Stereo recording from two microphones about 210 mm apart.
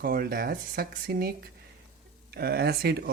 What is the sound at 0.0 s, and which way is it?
Speech, 45° right (ahead or behind).